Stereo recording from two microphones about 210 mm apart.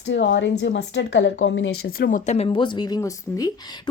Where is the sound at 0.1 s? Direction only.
55° left (ahead or behind).